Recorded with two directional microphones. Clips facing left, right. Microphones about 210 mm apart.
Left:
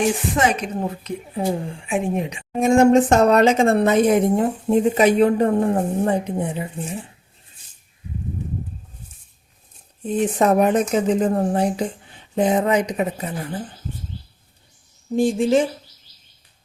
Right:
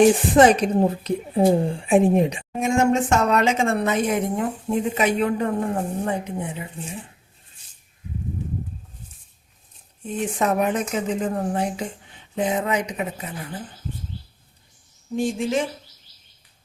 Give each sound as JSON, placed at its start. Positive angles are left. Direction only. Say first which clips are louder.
{"t": 0.3, "sound": "a woman's voice", "louder": "right 6 dB", "side_deg": -35}
{"t": 2.6, "sound": "speech", "louder": "left 6 dB", "side_deg": 35}
{"t": 10.1, "sound": "speech", "louder": "left 5 dB", "side_deg": 35}
{"t": 15.1, "sound": "speech", "louder": "left 5 dB", "side_deg": 35}